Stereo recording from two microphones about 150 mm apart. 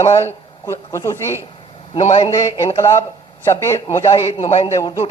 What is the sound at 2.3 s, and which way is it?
Speech, 20° left (ahead or behind).